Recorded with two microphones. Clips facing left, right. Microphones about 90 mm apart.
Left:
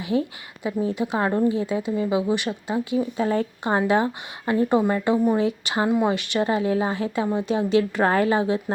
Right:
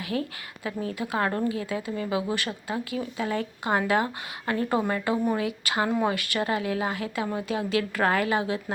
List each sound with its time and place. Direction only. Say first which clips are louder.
0.0 s speech: left 6 dB; 20° left (ahead or behind)